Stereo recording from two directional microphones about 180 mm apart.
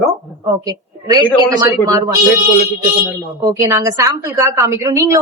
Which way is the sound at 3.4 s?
15° right (ahead or behind).